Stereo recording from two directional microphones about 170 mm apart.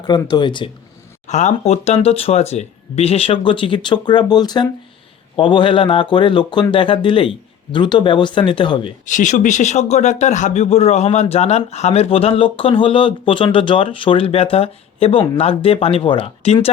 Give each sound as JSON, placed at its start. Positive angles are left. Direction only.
{"t": 0.1, "sound": "speech", "side_deg": 25}
{"t": 1.3, "sound": "speech", "side_deg": 45}
{"t": 9.0, "sound": "speech", "side_deg": 45}